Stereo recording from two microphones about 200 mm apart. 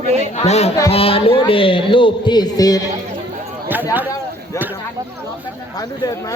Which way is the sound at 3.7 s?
10° right (ahead or behind).